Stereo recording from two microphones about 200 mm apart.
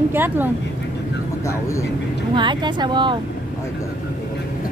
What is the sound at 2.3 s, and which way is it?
Speech, 20° right (ahead or behind).